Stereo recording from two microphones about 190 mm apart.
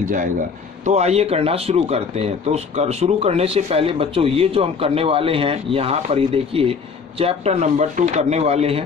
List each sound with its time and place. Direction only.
0.0 s a man's voice: 45° right (ahead or behind)